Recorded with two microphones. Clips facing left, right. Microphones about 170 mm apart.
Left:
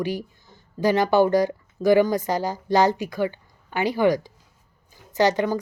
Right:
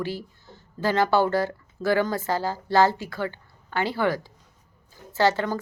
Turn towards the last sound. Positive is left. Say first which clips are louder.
# left 2 dB
turn(degrees=15)  # may be behind; listen again after turning